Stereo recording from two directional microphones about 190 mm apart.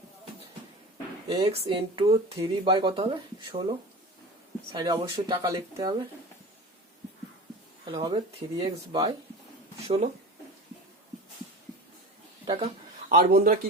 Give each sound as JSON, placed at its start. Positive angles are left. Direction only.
{"t": 1.3, "sound": "speech", "side_deg": -30}
{"t": 4.7, "sound": "speech", "side_deg": -20}
{"t": 7.9, "sound": "speech", "side_deg": -25}
{"t": 12.5, "sound": "speech", "side_deg": -25}
{"t": 13.1, "sound": "a man's voice", "side_deg": -45}